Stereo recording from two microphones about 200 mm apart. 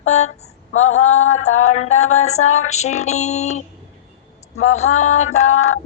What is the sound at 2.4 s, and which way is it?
Music, 90° left.